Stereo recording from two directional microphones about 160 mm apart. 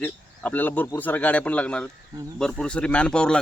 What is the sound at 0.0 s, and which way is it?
Speech, 10° left (ahead or behind).